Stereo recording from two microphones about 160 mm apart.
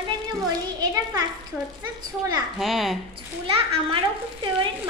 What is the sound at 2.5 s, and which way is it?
Speech, centre (ahead or behind).